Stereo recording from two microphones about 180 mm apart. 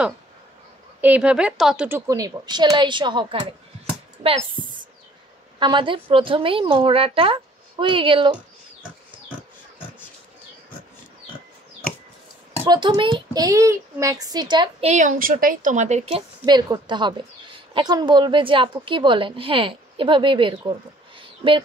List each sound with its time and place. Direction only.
1.0 s a woman's voice: 5° right (ahead or behind); by 3.5 s 30° right (ahead or behind)
5.6 s a woman's voice: 25° right (ahead or behind)
12.6 s a woman's voice: 25° right (ahead or behind)
14.9 s a woman's voice: 45° right (ahead or behind); by 20.7 s 30° right (ahead or behind)
21.2 s a sound: 30° right (ahead or behind)